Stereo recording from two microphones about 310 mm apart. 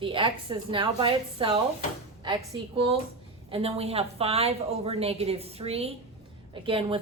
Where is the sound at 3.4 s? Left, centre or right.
Centre.